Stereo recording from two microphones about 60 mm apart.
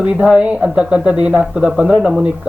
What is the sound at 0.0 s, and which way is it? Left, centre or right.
Speech, centre.